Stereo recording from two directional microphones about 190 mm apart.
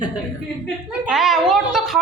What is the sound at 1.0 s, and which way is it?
Speech, centre (ahead or behind).